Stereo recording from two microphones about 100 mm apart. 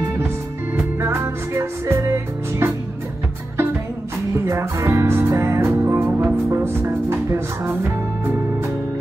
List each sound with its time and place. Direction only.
0.7 s music: 25° right (ahead or behind)
4.5 s music: 30° right (ahead or behind)